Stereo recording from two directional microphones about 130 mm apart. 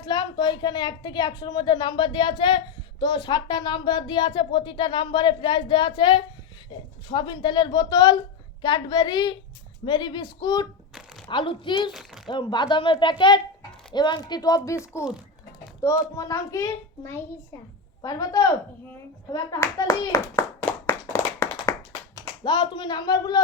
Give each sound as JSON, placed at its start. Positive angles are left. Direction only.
{"t": 0.0, "sound": "speech", "side_deg": 35}
{"t": 11.9, "sound": "speech", "side_deg": 0}
{"t": 12.3, "sound": "speech", "side_deg": 35}
{"t": 15.8, "sound": "a child's voice", "side_deg": 20}
{"t": 18.0, "sound": "speech", "side_deg": 30}
{"t": 19.3, "sound": "clapping", "side_deg": 25}
{"t": 22.4, "sound": "speech", "side_deg": 35}